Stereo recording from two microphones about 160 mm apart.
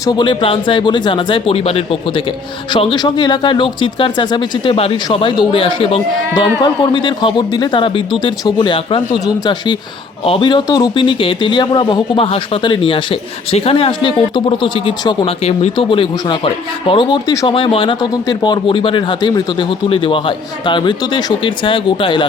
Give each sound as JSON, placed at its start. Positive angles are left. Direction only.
{"t": 0.0, "sound": "speech", "side_deg": 25}
{"t": 2.7, "sound": "speech", "side_deg": 25}